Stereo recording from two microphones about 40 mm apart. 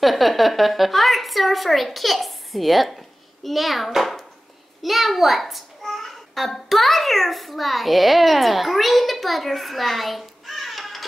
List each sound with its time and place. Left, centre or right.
0.0 s a woman's voice: centre